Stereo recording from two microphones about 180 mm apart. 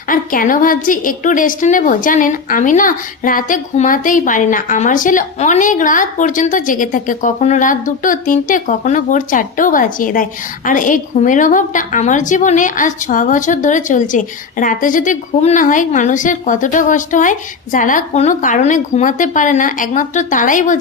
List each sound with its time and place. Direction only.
0.1 s a woman's voice: 50° left (ahead or behind)